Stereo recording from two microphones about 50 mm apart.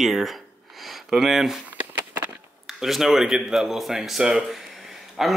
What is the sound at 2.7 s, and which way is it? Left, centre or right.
Speech, centre.